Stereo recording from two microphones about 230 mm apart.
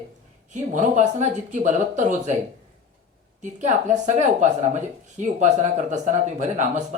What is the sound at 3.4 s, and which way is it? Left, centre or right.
Speech, right.